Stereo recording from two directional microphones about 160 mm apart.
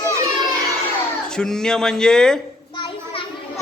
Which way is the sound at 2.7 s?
30° left (ahead or behind).